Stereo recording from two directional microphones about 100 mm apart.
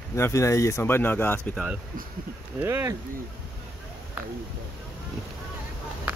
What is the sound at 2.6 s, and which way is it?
Speech, 25° right (ahead or behind).